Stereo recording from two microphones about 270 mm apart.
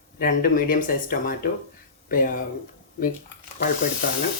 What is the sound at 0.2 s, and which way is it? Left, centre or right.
Speech, left.